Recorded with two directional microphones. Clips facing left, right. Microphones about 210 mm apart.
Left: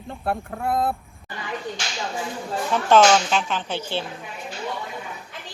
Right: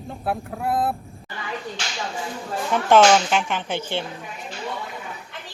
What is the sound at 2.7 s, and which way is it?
Speech, 10° right (ahead or behind).